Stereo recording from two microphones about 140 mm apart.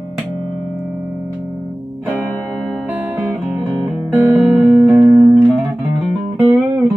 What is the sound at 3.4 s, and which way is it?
Music, centre (ahead or behind).